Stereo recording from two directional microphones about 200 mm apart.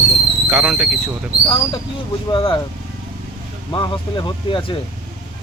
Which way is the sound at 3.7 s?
20° left (ahead or behind).